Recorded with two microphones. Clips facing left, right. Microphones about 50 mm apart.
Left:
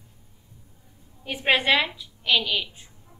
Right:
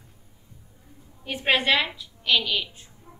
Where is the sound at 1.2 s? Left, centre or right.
Centre.